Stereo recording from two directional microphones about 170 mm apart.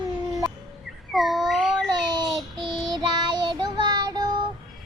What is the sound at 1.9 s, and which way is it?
Child singing, 25° right (ahead or behind).